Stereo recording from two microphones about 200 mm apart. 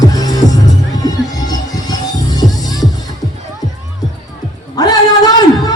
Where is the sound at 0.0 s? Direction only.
20° left (ahead or behind).